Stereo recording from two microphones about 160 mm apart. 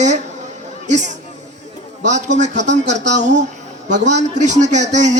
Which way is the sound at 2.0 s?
45° right (ahead or behind).